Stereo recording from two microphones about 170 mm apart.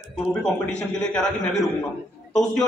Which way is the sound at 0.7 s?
5° left (ahead or behind).